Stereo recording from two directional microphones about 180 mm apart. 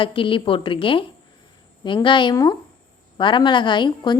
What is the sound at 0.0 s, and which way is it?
A woman's voice, 30° left (ahead or behind).